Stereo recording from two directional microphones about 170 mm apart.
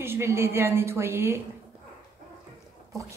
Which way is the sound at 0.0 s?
15° right (ahead or behind).